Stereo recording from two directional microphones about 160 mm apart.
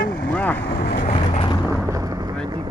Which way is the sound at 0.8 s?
60° left (ahead or behind).